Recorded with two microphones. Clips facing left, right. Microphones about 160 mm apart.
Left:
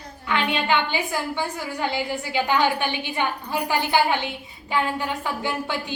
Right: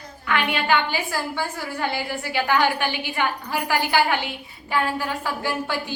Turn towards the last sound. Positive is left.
turn(degrees=20)  # may be behind; listen again after turning